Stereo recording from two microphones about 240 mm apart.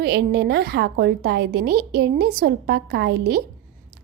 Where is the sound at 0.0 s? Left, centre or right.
Right.